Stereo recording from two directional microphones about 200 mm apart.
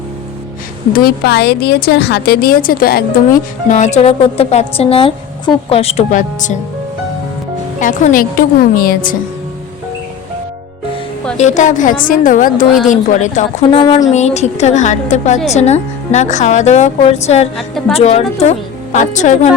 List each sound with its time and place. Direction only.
0.9 s a woman's voice: 50° left (ahead or behind)
3.7 s a woman's voice: 35° left (ahead or behind)
7.8 s a woman's voice: 40° left (ahead or behind)
11.3 s a woman's voice: 35° left (ahead or behind)
14.1 s a woman's voice: 35° left (ahead or behind)
17.6 s a woman's voice: centre (ahead or behind)
17.9 s a woman's voice: 30° left (ahead or behind)